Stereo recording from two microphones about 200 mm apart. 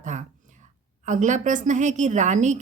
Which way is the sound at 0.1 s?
40° right (ahead or behind).